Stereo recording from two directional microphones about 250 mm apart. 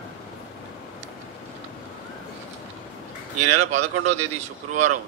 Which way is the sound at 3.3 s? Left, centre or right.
Right.